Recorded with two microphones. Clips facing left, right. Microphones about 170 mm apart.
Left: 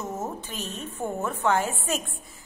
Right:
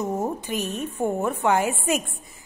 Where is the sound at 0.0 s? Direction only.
15° right (ahead or behind).